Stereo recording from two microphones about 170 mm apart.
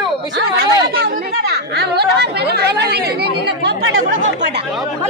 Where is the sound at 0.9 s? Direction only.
65° right (ahead or behind).